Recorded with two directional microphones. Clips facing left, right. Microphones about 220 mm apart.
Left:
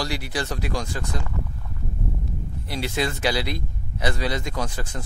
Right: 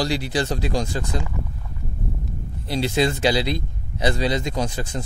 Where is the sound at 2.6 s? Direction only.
25° right (ahead or behind).